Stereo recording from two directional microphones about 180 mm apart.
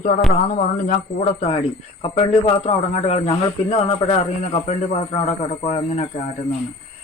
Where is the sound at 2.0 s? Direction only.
30° left (ahead or behind).